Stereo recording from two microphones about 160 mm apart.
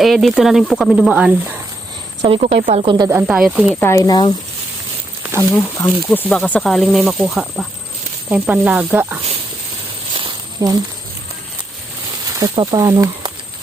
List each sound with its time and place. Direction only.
0.0 s speech: centre (ahead or behind)
2.2 s speech: 40° right (ahead or behind)
3.1 s speech: 10° right (ahead or behind)
3.8 s speech: 20° left (ahead or behind)
5.4 s speech: 10° left (ahead or behind); by 9.2 s 10° right (ahead or behind)
10.2 s a sound: 30° right (ahead or behind)
12.4 s speech: 25° right (ahead or behind)